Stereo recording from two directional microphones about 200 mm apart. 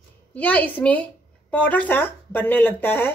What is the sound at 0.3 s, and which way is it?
Speech, 10° left (ahead or behind).